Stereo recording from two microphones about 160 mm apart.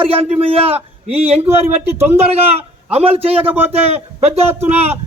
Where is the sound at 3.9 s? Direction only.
40° right (ahead or behind).